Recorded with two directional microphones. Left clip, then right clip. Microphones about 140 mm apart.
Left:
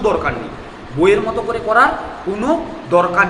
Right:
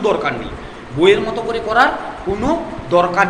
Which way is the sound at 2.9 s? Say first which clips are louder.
Left 1 dB; 15° right (ahead or behind).